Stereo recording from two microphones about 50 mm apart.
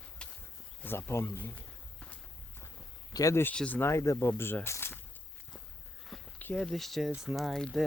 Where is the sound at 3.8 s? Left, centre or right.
Left.